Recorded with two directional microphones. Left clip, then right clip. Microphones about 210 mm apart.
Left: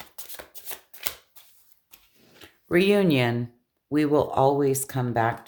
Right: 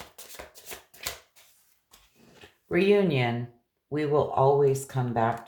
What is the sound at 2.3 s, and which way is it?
Speech, 45° left (ahead or behind).